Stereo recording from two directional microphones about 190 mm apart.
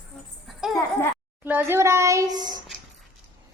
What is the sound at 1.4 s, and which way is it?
A woman's voice, 10° right (ahead or behind).